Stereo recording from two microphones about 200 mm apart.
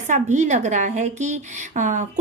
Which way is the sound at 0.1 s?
35° right (ahead or behind).